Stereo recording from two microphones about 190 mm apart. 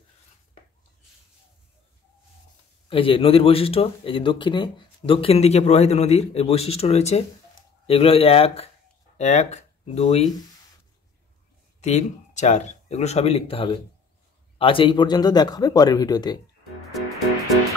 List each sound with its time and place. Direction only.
2.9 s speech: 30° left (ahead or behind)
11.8 s speech: 40° left (ahead or behind); by 16.3 s 20° left (ahead or behind)